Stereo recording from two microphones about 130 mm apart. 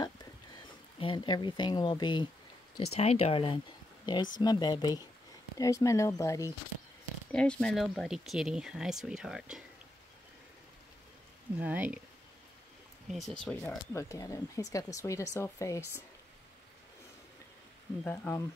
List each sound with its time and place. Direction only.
0.9 s speech: 40° left (ahead or behind)
2.9 s speech: 50° left (ahead or behind); by 6.5 s 25° left (ahead or behind)
7.3 s speech: 5° left (ahead or behind)
11.6 s speech: 10° right (ahead or behind)
13.1 s speech: 5° left (ahead or behind); by 15.8 s 25° left (ahead or behind)
18.0 s speech: 15° left (ahead or behind)